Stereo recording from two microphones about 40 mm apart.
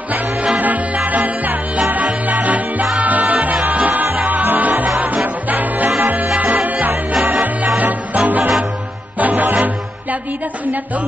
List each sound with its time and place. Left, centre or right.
0.9 s music: right
9.2 s music: right